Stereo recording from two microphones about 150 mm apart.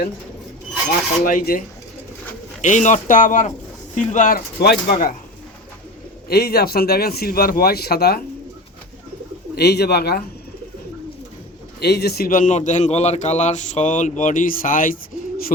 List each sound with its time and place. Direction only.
0.9 s a man's voice: 65° left (ahead or behind)
2.6 s a man's voice: 55° left (ahead or behind); by 5.1 s 80° left
6.2 s speech: 90° left
9.6 s speech: 90° left
11.8 s a man's voice: 90° left; by 14.9 s 65° left (ahead or behind)